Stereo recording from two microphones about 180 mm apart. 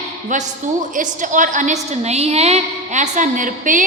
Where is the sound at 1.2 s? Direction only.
45° right (ahead or behind).